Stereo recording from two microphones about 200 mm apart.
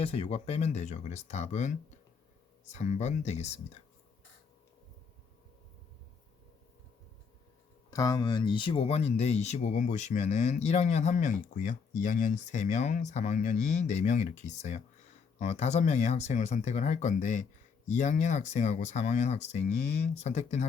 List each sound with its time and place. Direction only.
0.0 s speech: 30° left (ahead or behind)
7.9 s speech: 20° left (ahead or behind); by 20.4 s 35° left (ahead or behind)